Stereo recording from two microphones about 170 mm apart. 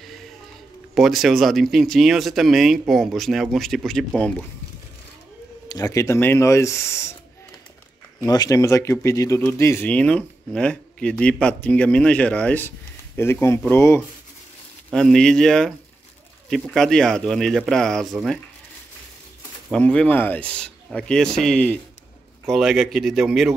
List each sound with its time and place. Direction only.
0.9 s speech: centre (ahead or behind)
5.7 s speech: 20° left (ahead or behind)
8.2 s speech: 20° left (ahead or behind)
14.9 s speech: 5° left (ahead or behind)
19.7 s speech: 5° left (ahead or behind)